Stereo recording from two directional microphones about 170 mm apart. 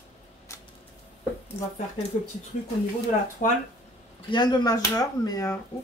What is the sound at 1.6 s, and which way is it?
Speech, 15° left (ahead or behind).